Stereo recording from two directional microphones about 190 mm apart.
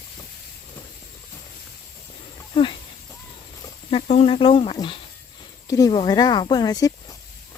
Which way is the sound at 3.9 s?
30° left (ahead or behind).